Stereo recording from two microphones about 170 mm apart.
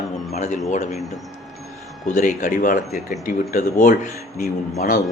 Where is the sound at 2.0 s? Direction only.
45° left (ahead or behind).